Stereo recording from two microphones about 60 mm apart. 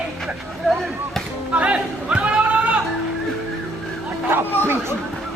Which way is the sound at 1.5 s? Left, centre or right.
Right.